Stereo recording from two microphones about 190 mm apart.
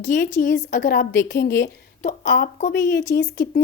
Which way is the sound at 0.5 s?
70° left (ahead or behind).